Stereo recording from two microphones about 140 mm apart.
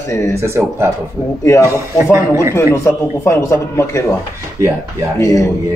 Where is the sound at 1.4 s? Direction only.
20° left (ahead or behind).